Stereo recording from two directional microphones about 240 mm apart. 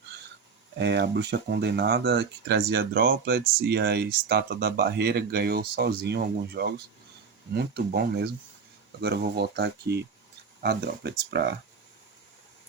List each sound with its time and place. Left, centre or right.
0.8 s speech: right